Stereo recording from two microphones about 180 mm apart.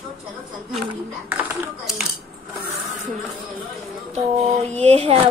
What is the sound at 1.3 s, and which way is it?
Dishes, 10° right (ahead or behind).